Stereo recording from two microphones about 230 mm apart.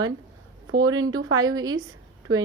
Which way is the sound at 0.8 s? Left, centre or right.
Right.